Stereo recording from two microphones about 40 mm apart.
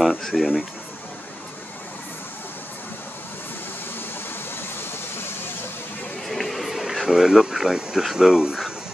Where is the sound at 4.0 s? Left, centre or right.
Left.